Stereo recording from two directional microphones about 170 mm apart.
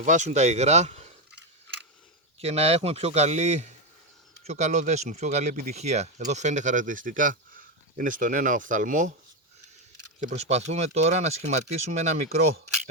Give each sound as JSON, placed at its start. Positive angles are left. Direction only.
{"t": 0.0, "sound": "speech", "side_deg": -45}
{"t": 2.4, "sound": "speech", "side_deg": -40}
{"t": 10.2, "sound": "speech", "side_deg": -45}